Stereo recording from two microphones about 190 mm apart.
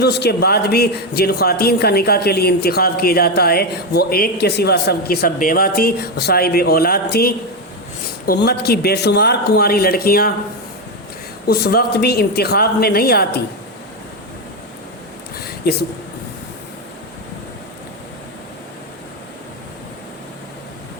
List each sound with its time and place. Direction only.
0.0 s speech: 60° left (ahead or behind)
11.4 s speech: 55° left (ahead or behind)
15.4 s a sound: 55° left (ahead or behind)